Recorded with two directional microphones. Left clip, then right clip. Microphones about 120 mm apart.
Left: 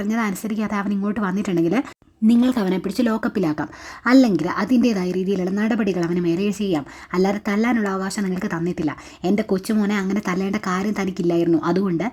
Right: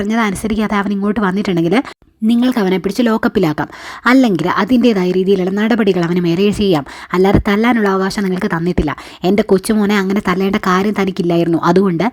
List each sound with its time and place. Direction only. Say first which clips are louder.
0.0 s a woman's voice: right 8 dB; 35° right (ahead or behind)